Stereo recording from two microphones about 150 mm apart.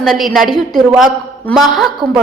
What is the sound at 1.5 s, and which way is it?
Speech, centre (ahead or behind).